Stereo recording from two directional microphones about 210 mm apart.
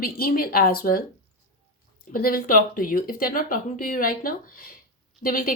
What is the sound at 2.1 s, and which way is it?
A woman's voice, 45° left (ahead or behind).